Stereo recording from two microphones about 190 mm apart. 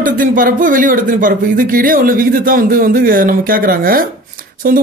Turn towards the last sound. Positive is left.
turn(degrees=-50)  # may be behind; listen again after turning